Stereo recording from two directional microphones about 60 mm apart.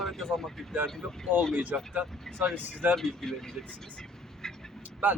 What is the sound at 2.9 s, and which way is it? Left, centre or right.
Speech, centre.